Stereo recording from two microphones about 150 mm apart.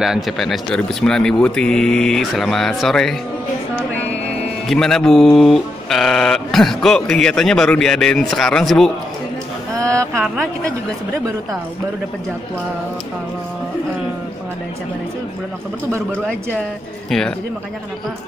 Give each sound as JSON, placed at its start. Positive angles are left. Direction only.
{"t": 0.0, "sound": "speech", "side_deg": 0}
{"t": 4.6, "sound": "speech", "side_deg": 5}
{"t": 9.8, "sound": "a sound", "side_deg": -20}
{"t": 10.1, "sound": "speech", "side_deg": 0}